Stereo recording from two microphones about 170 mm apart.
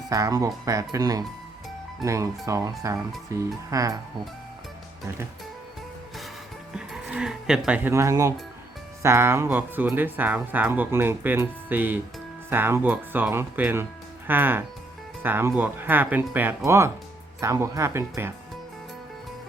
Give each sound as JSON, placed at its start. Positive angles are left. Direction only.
{"t": 0.1, "sound": "speech", "side_deg": -20}
{"t": 6.7, "sound": "speech", "side_deg": -5}